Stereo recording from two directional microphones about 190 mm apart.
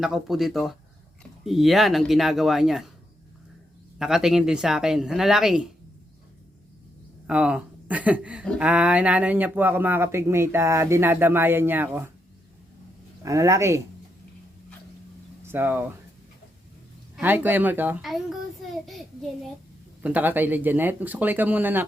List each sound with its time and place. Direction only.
0.0 s speech: centre (ahead or behind)
3.9 s speech: 5° right (ahead or behind)
7.3 s speech: 5° right (ahead or behind)
13.2 s speech: 15° right (ahead or behind)
15.4 s speech: 10° right (ahead or behind)
17.2 s speech: 10° right (ahead or behind)